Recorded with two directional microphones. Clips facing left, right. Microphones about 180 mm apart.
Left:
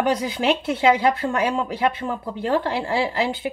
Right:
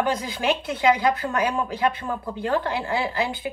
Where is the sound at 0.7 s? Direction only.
25° left (ahead or behind).